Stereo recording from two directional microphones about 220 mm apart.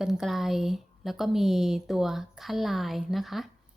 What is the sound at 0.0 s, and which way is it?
A woman's voice, centre (ahead or behind).